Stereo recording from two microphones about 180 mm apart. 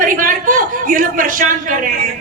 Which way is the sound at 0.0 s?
50° right (ahead or behind).